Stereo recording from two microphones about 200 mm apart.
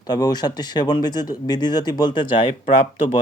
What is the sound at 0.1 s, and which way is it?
Speech, 20° left (ahead or behind).